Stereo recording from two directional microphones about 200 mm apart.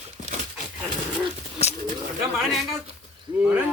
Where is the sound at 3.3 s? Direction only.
5° right (ahead or behind).